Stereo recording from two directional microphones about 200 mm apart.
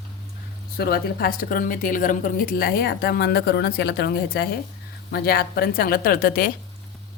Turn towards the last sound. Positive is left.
turn(degrees=45)  # may be behind; listen again after turning